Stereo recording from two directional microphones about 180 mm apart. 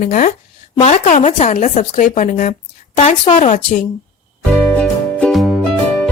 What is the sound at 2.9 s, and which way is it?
Speech, 30° left (ahead or behind).